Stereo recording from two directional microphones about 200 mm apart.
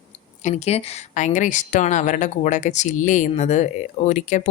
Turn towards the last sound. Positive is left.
turn(degrees=35)  # may be behind; listen again after turning